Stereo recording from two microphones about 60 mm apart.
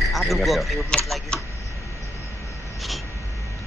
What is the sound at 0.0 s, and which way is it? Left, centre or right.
Speech, centre.